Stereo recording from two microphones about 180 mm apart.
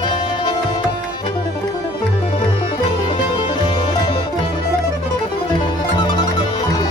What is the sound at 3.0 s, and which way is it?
Music, 25° left (ahead or behind).